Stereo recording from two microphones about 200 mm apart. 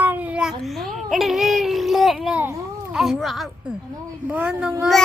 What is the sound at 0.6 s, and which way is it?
A child's voice, centre (ahead or behind).